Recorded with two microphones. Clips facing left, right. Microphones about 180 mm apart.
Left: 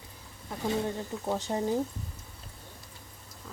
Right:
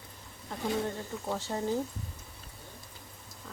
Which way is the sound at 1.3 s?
15° left (ahead or behind).